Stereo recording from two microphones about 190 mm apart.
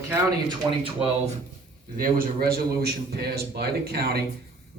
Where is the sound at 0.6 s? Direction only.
15° right (ahead or behind).